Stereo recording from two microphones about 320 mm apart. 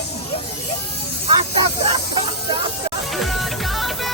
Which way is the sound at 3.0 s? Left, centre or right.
Centre.